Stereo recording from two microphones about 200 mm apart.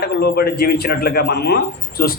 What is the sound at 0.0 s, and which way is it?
A man's voice, 50° left (ahead or behind).